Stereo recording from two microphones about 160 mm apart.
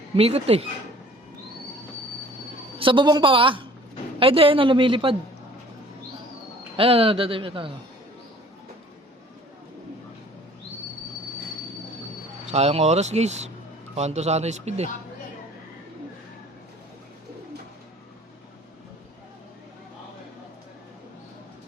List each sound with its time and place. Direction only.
0.2 s a woman's voice: 40° right (ahead or behind)
2.7 s a woman's voice: 30° right (ahead or behind)
6.7 s a woman's voice: 35° right (ahead or behind)
12.5 s speech: 40° right (ahead or behind)